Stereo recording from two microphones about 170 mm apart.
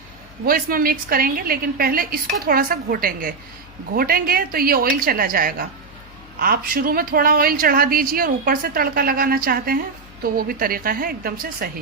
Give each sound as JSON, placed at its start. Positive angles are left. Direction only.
{"t": 0.4, "sound": "a woman's voice", "side_deg": -60}